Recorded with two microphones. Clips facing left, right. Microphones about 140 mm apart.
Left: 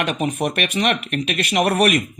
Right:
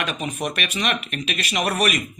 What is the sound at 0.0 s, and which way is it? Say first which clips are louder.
Speech: left 5 dB; 60° left (ahead or behind).